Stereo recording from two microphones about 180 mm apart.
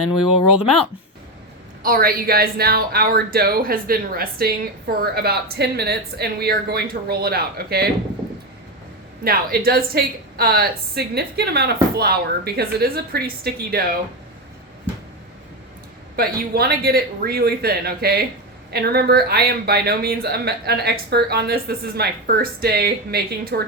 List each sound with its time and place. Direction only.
1.8 s speech: 55° right (ahead or behind)
9.2 s speech: 55° right (ahead or behind)
16.1 s speech: 55° right (ahead or behind)